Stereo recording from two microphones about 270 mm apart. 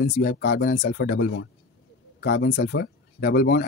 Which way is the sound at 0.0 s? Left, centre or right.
Left.